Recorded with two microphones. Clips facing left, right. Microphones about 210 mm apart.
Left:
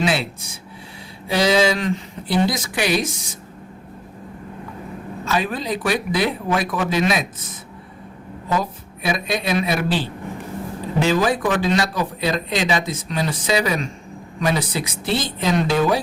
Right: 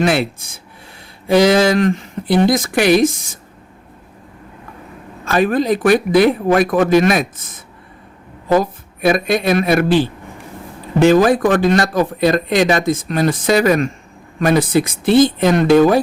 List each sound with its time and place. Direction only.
0.0 s speech: 55° right (ahead or behind)
5.2 s speech: 55° right (ahead or behind)
8.5 s speech: 55° right (ahead or behind)
11.0 s speech: 55° right (ahead or behind)